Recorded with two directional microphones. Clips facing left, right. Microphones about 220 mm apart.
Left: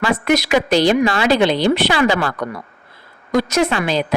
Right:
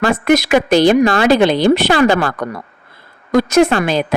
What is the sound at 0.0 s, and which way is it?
Speech, 45° right (ahead or behind).